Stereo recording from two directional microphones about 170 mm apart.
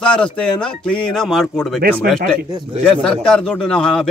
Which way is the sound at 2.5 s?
25° right (ahead or behind).